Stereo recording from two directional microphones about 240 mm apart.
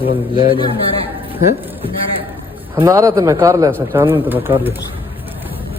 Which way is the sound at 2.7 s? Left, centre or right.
Centre.